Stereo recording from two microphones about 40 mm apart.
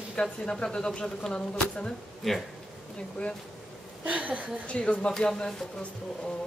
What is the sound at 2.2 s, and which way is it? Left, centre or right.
Speech, centre.